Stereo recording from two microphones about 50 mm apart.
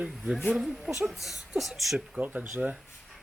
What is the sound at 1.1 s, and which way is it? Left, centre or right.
Speech, centre.